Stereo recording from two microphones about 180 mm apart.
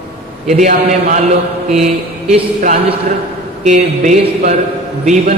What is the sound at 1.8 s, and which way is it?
Mantra, 35° right (ahead or behind).